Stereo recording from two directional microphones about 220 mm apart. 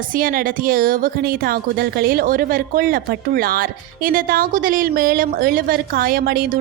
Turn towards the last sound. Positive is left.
turn(degrees=-40)  # may be behind; listen again after turning